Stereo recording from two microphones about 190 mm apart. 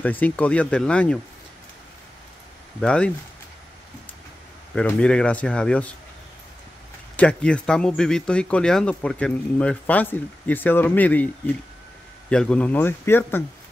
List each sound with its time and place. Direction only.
0.0 s speech: 10° left (ahead or behind)
2.8 s speech: 5° left (ahead or behind)
4.7 s speech: 5° left (ahead or behind)
7.2 s a man's voice: 5° left (ahead or behind)